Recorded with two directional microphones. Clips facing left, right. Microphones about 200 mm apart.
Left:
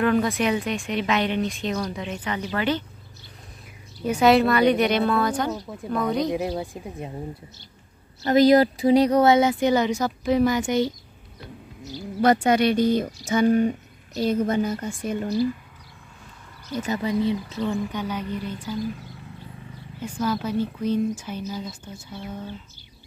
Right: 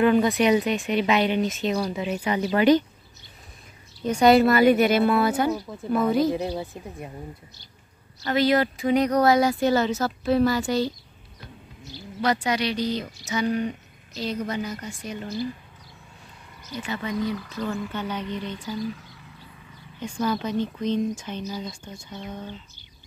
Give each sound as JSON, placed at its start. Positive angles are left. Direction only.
{"t": 0.0, "sound": "speech", "side_deg": 0}
{"t": 4.0, "sound": "speech", "side_deg": 5}
{"t": 6.3, "sound": "speech", "side_deg": 10}
{"t": 8.3, "sound": "speech", "side_deg": 40}
{"t": 11.8, "sound": "speech", "side_deg": 45}
{"t": 16.8, "sound": "speech", "side_deg": 40}
{"t": 17.1, "sound": "speech", "side_deg": 25}
{"t": 20.2, "sound": "speech", "side_deg": 5}